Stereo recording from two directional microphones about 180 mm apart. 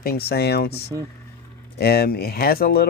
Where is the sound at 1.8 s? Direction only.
60° left (ahead or behind).